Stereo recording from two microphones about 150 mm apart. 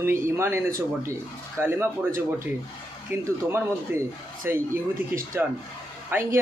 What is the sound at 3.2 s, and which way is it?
A man's voice, 20° right (ahead or behind).